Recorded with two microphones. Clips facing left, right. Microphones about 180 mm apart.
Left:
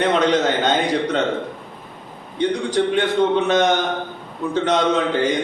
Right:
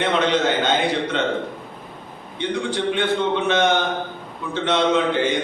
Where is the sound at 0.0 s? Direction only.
40° left (ahead or behind).